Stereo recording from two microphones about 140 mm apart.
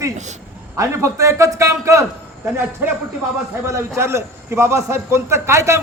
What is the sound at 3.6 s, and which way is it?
A man's voice, 20° right (ahead or behind).